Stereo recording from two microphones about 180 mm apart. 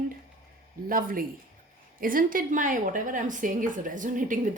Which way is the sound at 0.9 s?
50° right (ahead or behind).